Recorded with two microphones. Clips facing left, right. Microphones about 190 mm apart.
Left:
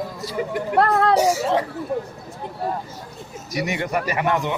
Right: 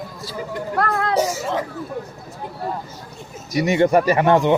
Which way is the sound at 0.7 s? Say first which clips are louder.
Left 4 dB; 30° left (ahead or behind).